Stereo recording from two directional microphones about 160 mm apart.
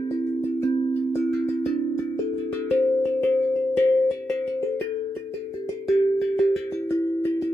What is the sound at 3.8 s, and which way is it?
Music, 15° left (ahead or behind).